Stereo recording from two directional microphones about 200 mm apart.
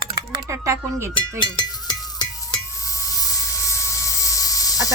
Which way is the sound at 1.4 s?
20° left (ahead or behind).